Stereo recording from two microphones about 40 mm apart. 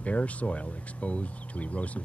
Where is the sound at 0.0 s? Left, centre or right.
Left.